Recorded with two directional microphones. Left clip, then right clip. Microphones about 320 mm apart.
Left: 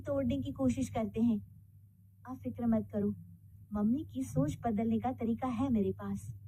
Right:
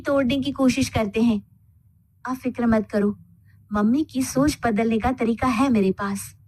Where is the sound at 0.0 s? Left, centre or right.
Right.